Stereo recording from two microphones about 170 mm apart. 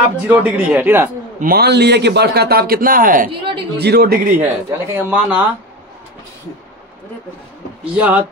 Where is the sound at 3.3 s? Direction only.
30° right (ahead or behind).